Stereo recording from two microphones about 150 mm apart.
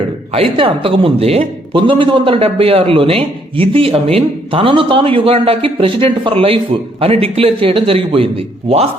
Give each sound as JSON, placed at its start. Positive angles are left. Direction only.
{"t": 0.3, "sound": "a man's voice", "side_deg": -35}